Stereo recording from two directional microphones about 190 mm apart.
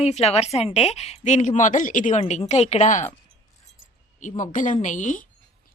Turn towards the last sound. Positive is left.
turn(degrees=40)  # may be behind; listen again after turning